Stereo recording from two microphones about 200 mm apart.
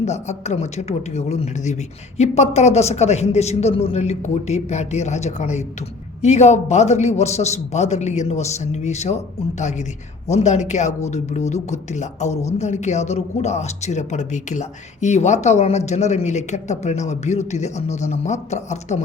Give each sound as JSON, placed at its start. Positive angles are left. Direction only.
{"t": 0.0, "sound": "speech", "side_deg": 35}